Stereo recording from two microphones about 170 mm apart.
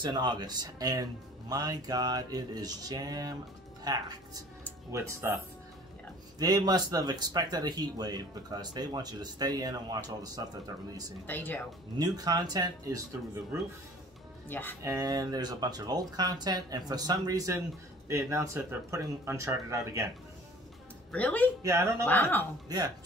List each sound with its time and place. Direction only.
0.0 s speech: 25° right (ahead or behind)
6.4 s speech: 25° right (ahead or behind)
11.2 s speech: 10° left (ahead or behind)
12.0 s speech: 20° right (ahead or behind)
14.5 s speech: 10° left (ahead or behind)
14.8 s speech: 20° right (ahead or behind)
21.1 s speech: 10° left (ahead or behind)
21.6 s speech: 20° right (ahead or behind)
22.0 s speech: 10° left (ahead or behind)